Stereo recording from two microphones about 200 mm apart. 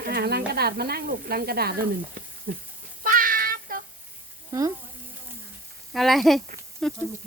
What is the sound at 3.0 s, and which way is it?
Child singing, 45° right (ahead or behind).